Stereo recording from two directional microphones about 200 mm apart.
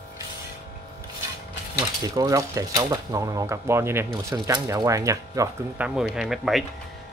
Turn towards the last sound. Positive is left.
turn(degrees=0)  # may be behind; listen again after turning